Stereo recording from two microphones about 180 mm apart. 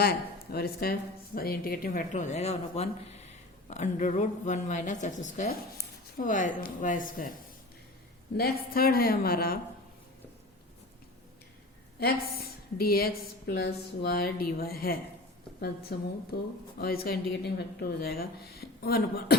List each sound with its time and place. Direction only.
0.5 s speech: 60° left (ahead or behind)
8.4 s speech: 55° left (ahead or behind)
11.9 s a woman's voice: 60° left (ahead or behind)